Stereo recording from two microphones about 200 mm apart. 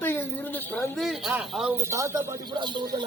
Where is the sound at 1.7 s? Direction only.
15° right (ahead or behind).